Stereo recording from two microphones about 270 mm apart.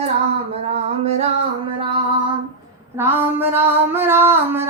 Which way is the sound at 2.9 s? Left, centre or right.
Centre.